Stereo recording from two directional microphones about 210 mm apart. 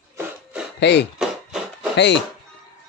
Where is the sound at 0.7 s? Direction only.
55° left (ahead or behind).